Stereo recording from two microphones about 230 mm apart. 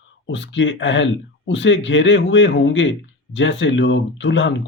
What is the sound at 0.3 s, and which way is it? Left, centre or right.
Speech, left.